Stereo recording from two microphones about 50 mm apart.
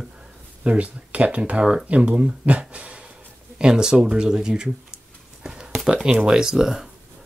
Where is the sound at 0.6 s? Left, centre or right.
Right.